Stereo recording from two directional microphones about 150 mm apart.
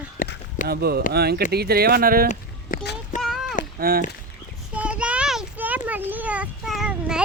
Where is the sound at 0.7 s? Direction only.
90° right; by 2.2 s 75° right (ahead or behind).